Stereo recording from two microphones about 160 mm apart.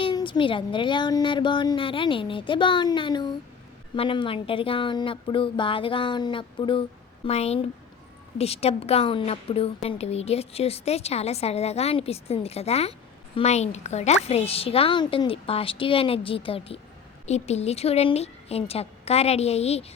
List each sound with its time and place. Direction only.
0.0 s a woman's voice: 30° left (ahead or behind)